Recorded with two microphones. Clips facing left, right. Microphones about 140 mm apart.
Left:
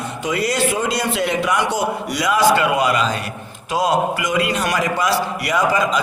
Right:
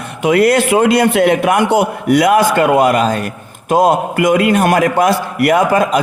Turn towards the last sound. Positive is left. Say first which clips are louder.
# right 6 dB
turn(degrees=-55)  # may be behind; listen again after turning